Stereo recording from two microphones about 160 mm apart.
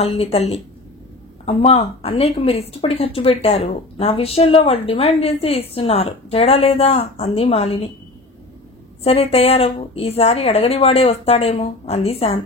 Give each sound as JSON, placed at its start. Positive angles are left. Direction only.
{"t": 0.0, "sound": "speech", "side_deg": 35}
{"t": 9.0, "sound": "speech", "side_deg": 40}